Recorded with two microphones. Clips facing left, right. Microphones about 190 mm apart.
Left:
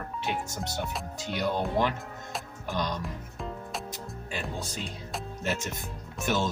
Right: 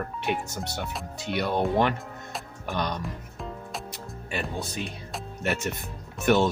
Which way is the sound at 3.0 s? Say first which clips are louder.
Right 1 dB; centre (ahead or behind).